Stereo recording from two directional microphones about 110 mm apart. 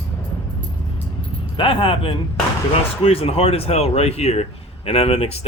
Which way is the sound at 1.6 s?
55° left (ahead or behind).